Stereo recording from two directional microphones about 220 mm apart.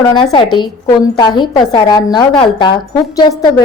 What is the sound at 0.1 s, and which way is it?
A woman's voice, 20° left (ahead or behind).